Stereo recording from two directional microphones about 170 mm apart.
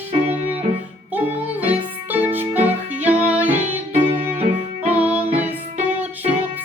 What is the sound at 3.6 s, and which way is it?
Music, 40° right (ahead or behind).